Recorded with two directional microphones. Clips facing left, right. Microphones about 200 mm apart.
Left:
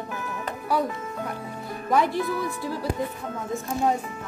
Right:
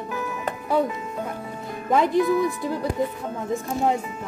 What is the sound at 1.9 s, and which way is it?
Speech, 20° right (ahead or behind).